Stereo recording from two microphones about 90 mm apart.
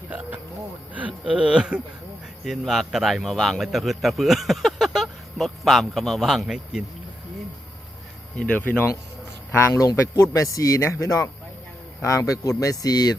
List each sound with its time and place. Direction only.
0.1 s insect: 20° right (ahead or behind)
1.3 s a man's voice: 10° right (ahead or behind)
8.4 s speech: 15° left (ahead or behind)
9.6 s speech: 30° left (ahead or behind)